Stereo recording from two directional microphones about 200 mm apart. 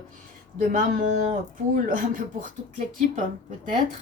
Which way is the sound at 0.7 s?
40° right (ahead or behind).